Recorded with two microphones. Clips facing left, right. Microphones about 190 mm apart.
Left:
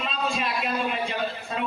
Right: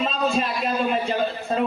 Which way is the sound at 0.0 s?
35° right (ahead or behind).